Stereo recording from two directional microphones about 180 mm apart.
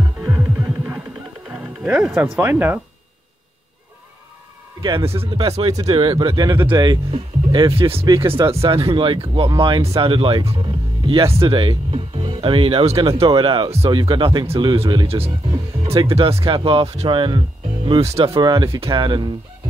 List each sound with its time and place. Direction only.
0.2 s music: 10° right (ahead or behind)
1.5 s speech: 5° right (ahead or behind)
4.8 s speech: 25° right (ahead or behind)
8.0 s speech: 15° right (ahead or behind)
8.6 s speech: 30° right (ahead or behind)